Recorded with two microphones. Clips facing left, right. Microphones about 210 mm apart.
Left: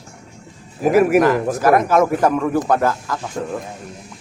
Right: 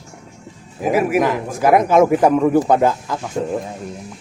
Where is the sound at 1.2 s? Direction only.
15° right (ahead or behind).